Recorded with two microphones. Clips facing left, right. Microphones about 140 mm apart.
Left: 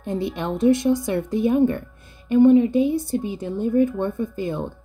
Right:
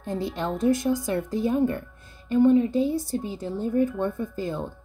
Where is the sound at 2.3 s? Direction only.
70° left (ahead or behind).